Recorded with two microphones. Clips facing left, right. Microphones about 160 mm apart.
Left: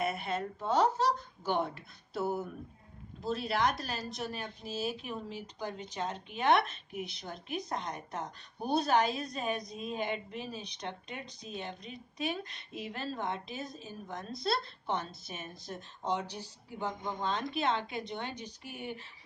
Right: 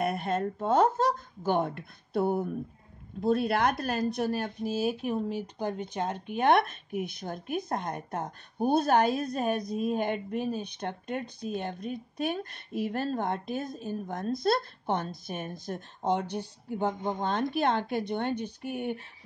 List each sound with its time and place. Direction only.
0.0 s a woman's voice: 50° right (ahead or behind)